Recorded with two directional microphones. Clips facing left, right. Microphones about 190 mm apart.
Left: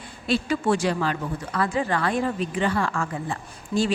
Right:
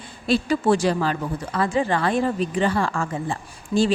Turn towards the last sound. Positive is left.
turn(degrees=-30)  # may be behind; listen again after turning